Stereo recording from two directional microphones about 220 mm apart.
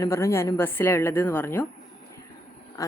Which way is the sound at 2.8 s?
15° left (ahead or behind).